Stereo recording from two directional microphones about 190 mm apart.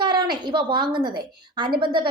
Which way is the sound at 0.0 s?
25° right (ahead or behind).